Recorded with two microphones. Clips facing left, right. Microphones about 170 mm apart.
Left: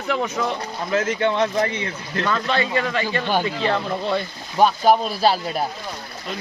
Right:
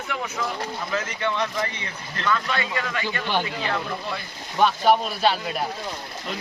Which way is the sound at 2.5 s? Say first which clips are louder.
Left 6 dB; 30° left (ahead or behind).